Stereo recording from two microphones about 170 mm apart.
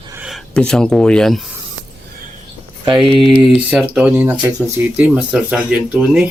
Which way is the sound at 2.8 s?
30° right (ahead or behind).